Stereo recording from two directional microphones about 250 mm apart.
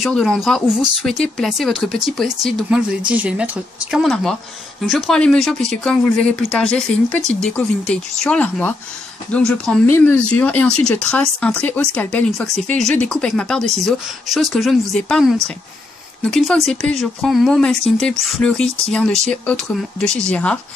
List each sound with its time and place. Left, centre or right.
0.0 s speech: centre